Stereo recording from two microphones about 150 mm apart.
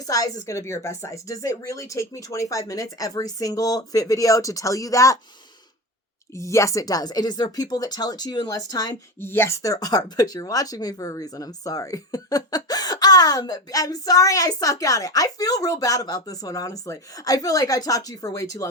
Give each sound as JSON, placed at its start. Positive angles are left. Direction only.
{"t": 0.1, "sound": "speech", "side_deg": 25}
{"t": 6.3, "sound": "speech", "side_deg": 20}